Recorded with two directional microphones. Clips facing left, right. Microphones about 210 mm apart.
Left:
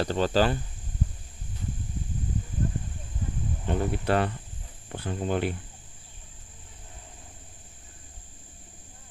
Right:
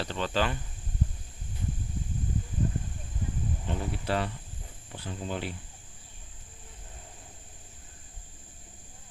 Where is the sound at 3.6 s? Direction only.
55° left (ahead or behind).